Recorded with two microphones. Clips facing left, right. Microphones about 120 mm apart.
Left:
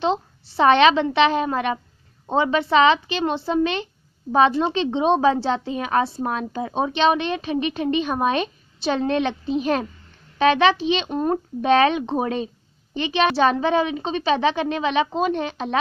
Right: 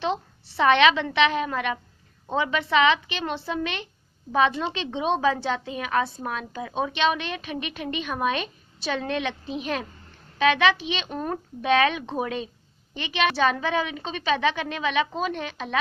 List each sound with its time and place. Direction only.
0.0 s a woman's voice: 30° left (ahead or behind)